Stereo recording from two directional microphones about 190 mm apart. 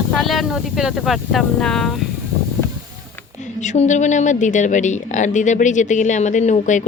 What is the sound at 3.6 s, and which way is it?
Speech, 40° left (ahead or behind).